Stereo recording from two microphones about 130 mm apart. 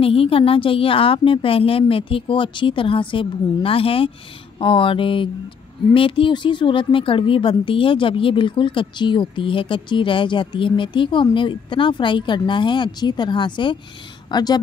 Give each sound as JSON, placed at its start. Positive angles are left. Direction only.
{"t": 0.0, "sound": "a woman's voice", "side_deg": 45}